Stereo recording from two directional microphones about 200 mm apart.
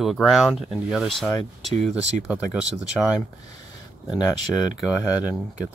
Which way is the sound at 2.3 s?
5° right (ahead or behind).